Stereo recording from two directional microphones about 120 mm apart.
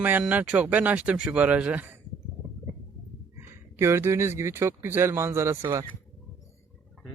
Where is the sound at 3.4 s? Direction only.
20° right (ahead or behind).